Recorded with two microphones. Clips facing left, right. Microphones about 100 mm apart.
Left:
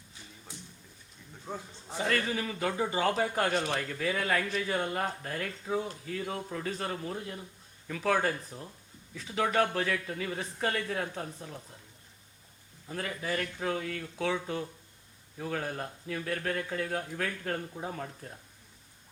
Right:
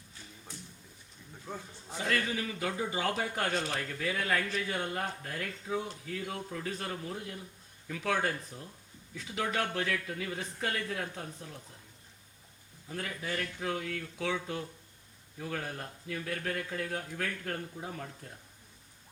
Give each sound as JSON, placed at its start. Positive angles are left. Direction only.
{"t": 1.5, "sound": "a sound", "side_deg": 15}
{"t": 1.9, "sound": "speech", "side_deg": 35}
{"t": 12.9, "sound": "speech", "side_deg": 40}